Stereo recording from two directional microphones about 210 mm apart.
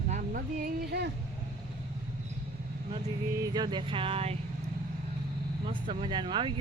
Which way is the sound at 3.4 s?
20° right (ahead or behind).